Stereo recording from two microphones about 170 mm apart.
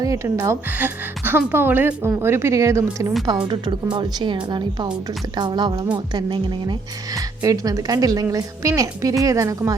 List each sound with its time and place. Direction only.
0.0 s a woman's voice: 20° right (ahead or behind)